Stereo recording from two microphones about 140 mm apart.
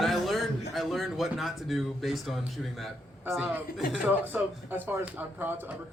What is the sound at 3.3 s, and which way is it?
Speech, 15° right (ahead or behind).